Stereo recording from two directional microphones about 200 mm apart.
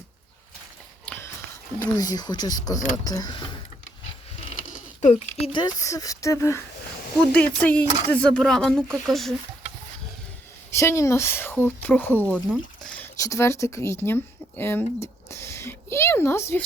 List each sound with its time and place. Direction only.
1.0 s walk: 10° left (ahead or behind)
2.0 s speech: 20° left (ahead or behind)
4.4 s speech: 35° left (ahead or behind); by 6.6 s 15° left (ahead or behind)
7.6 s speech: 5° left (ahead or behind)
10.7 s speech: 15° left (ahead or behind)
13.1 s speech: 15° left (ahead or behind)
14.6 s a sound: 10° left (ahead or behind)